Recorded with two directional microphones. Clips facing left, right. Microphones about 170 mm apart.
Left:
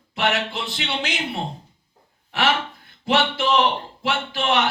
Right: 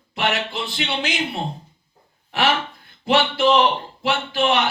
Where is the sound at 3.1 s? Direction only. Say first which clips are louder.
Right 3 dB; centre (ahead or behind).